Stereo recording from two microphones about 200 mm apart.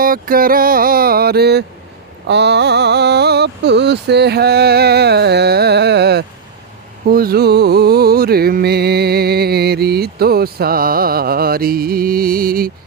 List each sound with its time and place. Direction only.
0.0 s mantra: 45° right (ahead or behind)
2.2 s a sound: 60° right (ahead or behind)
7.1 s mantra: 50° right (ahead or behind)